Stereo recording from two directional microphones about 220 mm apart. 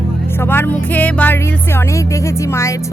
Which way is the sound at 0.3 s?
10° left (ahead or behind).